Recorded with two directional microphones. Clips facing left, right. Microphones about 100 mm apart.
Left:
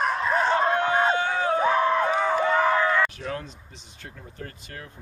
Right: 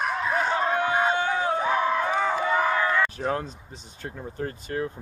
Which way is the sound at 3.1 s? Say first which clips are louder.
Right 5 dB; 35° right (ahead or behind).